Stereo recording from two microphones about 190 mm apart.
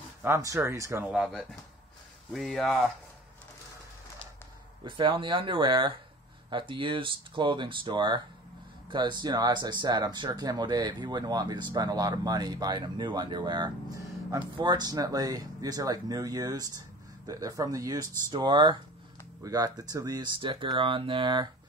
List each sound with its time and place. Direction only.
0.2 s speech: 15° right (ahead or behind); by 2.9 s centre (ahead or behind)
4.8 s speech: 25° right (ahead or behind)